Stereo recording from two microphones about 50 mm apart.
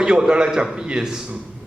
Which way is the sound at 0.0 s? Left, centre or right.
Centre.